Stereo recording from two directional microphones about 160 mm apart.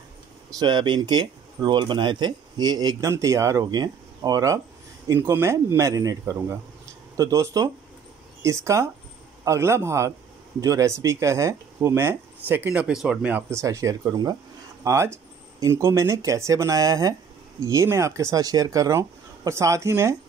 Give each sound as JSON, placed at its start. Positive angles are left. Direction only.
{"t": 0.6, "sound": "speech", "side_deg": -30}